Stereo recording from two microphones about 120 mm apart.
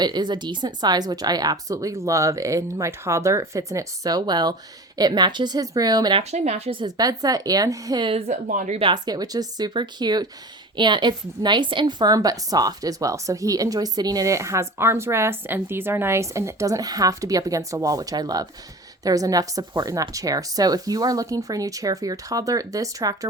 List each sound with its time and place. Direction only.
0.0 s a woman's voice: 35° right (ahead or behind)
6.3 s a woman's voice: 60° right (ahead or behind)
6.7 s speech: 35° right (ahead or behind)
8.1 s speech: 85° right
8.8 s a woman's voice: 35° right (ahead or behind)